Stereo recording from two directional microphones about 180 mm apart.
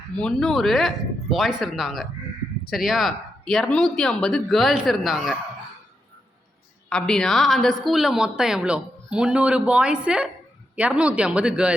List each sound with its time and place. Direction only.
0.2 s a woman's voice: 5° left (ahead or behind)
6.9 s a woman's voice: 5° left (ahead or behind)